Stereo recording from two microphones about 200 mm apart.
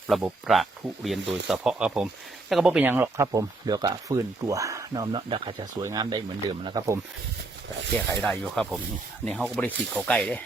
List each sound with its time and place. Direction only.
0.1 s speech: 5° right (ahead or behind)
7.9 s speech: 5° left (ahead or behind)